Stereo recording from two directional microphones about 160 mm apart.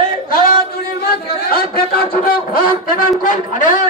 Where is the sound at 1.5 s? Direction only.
70° left (ahead or behind).